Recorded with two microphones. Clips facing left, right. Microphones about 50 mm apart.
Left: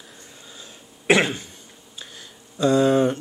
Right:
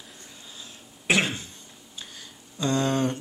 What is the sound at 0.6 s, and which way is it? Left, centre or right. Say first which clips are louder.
Throat clearing: left 2 dB; left.